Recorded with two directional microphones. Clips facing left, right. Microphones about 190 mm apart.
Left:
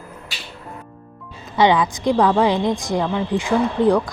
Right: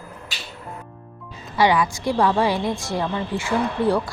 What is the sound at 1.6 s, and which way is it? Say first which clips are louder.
A woman's voice: left 3 dB; 20° left (ahead or behind).